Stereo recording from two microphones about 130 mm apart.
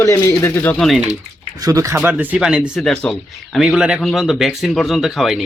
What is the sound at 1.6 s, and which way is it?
Speech, 25° right (ahead or behind).